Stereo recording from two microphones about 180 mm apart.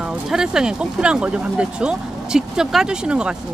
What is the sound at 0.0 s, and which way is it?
Speech, 5° right (ahead or behind).